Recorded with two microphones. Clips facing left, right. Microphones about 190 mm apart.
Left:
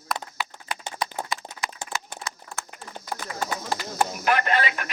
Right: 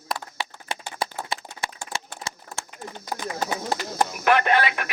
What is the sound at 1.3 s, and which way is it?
Clapping, 30° right (ahead or behind).